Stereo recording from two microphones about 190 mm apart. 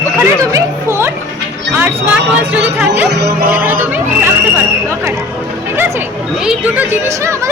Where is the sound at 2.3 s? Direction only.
5° right (ahead or behind).